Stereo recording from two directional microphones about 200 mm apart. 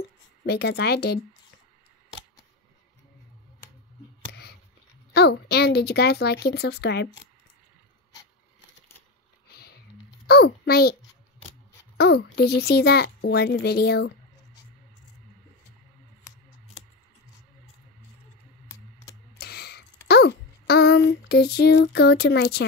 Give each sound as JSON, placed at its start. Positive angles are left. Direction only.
{"t": 0.5, "sound": "speech", "side_deg": 55}
{"t": 4.3, "sound": "a sound", "side_deg": 55}
{"t": 5.1, "sound": "speech", "side_deg": 55}
{"t": 9.5, "sound": "a sound", "side_deg": 50}
{"t": 10.2, "sound": "a child's voice", "side_deg": 50}
{"t": 12.0, "sound": "a child's voice", "side_deg": 55}
{"t": 18.7, "sound": "typing", "side_deg": 15}
{"t": 19.3, "sound": "computer keyboard", "side_deg": 50}
{"t": 20.1, "sound": "a sound", "side_deg": 55}